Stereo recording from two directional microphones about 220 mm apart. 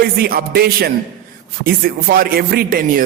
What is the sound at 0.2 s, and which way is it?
A man's voice, 45° right (ahead or behind).